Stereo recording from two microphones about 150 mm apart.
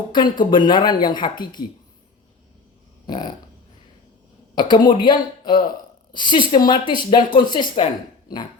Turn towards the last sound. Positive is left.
turn(degrees=30)  # may be behind; listen again after turning